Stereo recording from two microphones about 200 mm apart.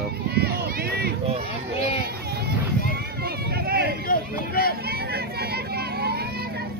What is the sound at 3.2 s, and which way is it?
Run, 50° right (ahead or behind).